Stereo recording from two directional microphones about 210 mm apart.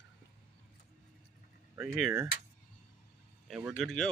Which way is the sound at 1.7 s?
10° right (ahead or behind).